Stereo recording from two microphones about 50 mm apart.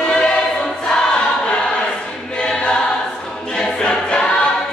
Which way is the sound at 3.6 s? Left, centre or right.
Centre.